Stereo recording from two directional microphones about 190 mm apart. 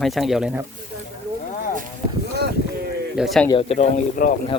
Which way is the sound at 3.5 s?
30° left (ahead or behind).